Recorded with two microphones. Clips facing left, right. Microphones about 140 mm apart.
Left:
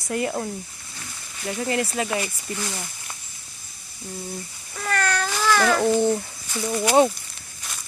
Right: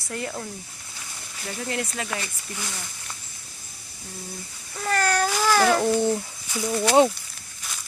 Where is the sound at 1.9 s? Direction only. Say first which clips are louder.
Left 6 dB; 5° left (ahead or behind).